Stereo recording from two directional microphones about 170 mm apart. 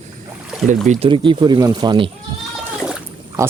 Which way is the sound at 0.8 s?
45° right (ahead or behind).